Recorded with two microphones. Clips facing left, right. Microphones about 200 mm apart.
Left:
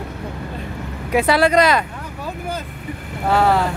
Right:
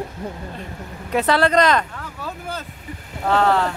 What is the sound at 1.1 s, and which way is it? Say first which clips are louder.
Speech: left 2 dB; 10° left (ahead or behind).